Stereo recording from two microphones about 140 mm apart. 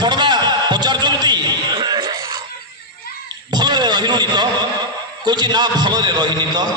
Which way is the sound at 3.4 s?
30° right (ahead or behind).